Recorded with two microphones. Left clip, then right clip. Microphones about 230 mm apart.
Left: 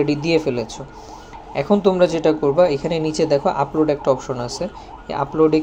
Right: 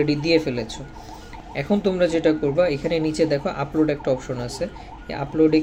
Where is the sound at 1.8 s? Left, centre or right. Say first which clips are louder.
Left 2 dB; centre.